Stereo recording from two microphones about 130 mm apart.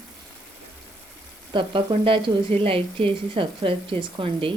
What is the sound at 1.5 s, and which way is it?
Speech, 40° right (ahead or behind).